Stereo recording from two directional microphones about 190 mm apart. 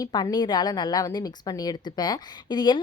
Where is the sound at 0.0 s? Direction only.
20° left (ahead or behind).